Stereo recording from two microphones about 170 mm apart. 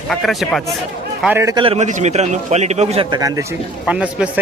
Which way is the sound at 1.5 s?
35° right (ahead or behind).